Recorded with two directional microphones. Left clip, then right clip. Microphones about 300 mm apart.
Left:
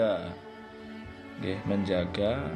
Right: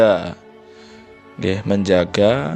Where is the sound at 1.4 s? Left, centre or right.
Right.